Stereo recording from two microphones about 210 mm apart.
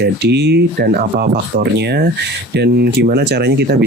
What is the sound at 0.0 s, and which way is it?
Speech, 50° right (ahead or behind).